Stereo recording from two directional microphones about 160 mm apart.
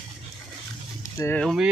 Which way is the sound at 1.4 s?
Centre (ahead or behind).